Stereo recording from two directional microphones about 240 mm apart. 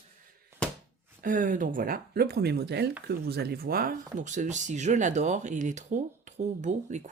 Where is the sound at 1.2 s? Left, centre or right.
Right.